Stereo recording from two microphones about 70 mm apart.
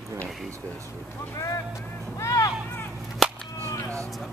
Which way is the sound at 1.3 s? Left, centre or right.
Left.